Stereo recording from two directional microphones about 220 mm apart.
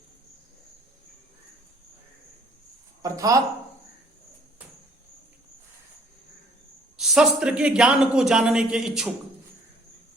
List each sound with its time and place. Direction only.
3.0 s a woman's voice: 15° right (ahead or behind)
6.9 s speech: centre (ahead or behind)